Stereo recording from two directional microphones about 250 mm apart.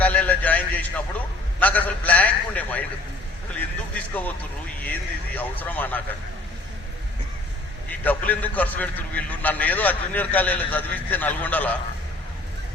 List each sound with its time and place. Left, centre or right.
0.0 s a sound: centre
4.8 s a man's voice: centre
7.9 s a man's voice: centre